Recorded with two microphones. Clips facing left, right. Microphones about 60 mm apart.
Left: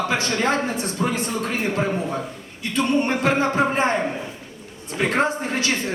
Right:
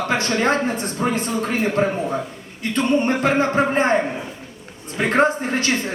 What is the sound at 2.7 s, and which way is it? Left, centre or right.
A man's voice, right.